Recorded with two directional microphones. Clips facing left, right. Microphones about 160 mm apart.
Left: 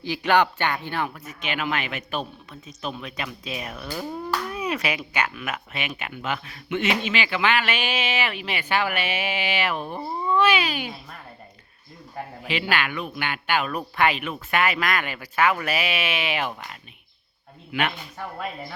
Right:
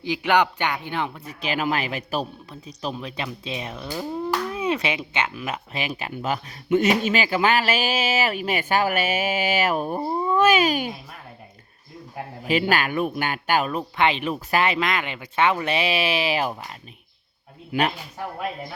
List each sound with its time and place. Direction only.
0.0 s speech: 15° right (ahead or behind)
1.2 s speech: 35° right (ahead or behind)
12.5 s speech: 40° right (ahead or behind)
13.7 s speech: 25° right (ahead or behind)
17.7 s speech: 35° right (ahead or behind)